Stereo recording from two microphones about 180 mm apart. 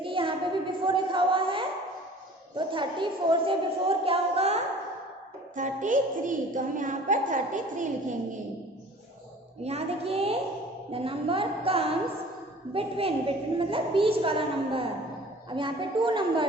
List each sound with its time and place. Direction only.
0.0 s a sound: 30° right (ahead or behind)
2.6 s a woman's voice: 25° right (ahead or behind); by 7.9 s 45° right (ahead or behind)
9.6 s a woman's voice: 35° right (ahead or behind)